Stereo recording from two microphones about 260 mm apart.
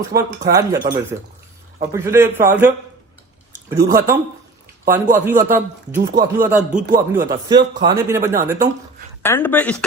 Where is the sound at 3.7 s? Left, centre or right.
Centre.